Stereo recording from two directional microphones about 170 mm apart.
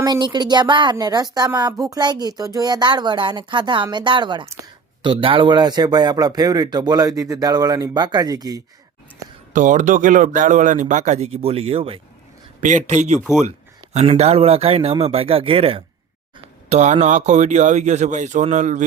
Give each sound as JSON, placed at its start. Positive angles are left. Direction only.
{"t": 0.0, "sound": "a woman's voice", "side_deg": -25}
{"t": 9.5, "sound": "a man's voice", "side_deg": -45}
{"t": 12.5, "sound": "a man's voice", "side_deg": -45}